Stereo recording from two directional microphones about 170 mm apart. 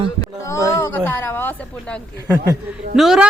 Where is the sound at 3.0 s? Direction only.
Centre (ahead or behind).